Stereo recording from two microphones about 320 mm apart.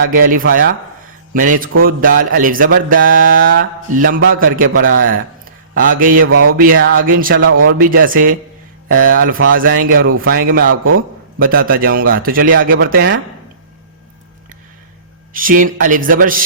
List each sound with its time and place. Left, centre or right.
0.1 s speech: right
4.2 s a man's voice: right
4.5 s speech: right
5.5 s a sound: right
6.2 s a man's voice: right
6.5 s speech: right
7.3 s speech: right
7.7 s speech: right
15.3 s speech: right